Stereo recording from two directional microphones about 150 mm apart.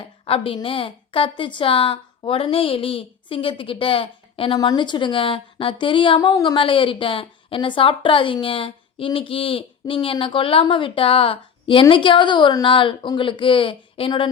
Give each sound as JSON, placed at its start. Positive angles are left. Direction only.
{"t": 0.3, "sound": "a woman's voice", "side_deg": 40}
{"t": 4.5, "sound": "a woman's voice", "side_deg": 25}